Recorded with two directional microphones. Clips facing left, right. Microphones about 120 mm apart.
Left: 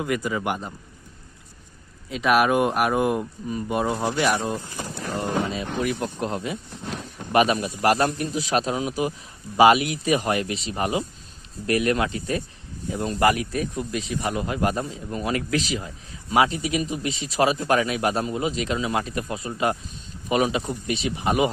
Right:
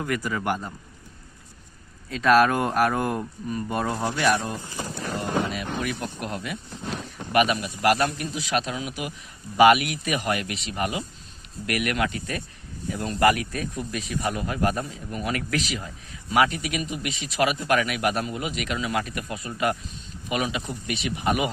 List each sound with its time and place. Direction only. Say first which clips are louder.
0.0 s speech: left 2 dB; 15° left (ahead or behind)
2.0 s speech: right 1 dB; 15° left (ahead or behind)